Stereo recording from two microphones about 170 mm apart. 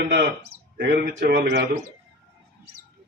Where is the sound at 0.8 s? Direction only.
50° right (ahead or behind).